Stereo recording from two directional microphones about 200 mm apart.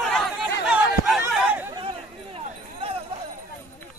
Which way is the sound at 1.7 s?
25° right (ahead or behind).